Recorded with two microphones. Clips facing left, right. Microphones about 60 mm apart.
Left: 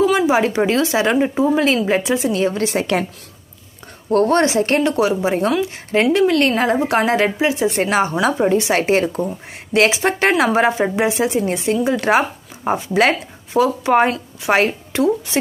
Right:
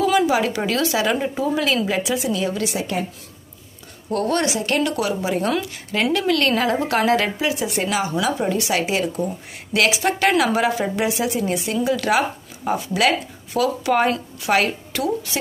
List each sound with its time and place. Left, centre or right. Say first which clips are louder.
0.0 s a woman's voice: left 3 dB; left
4.1 s a woman's voice: left 6 dB; left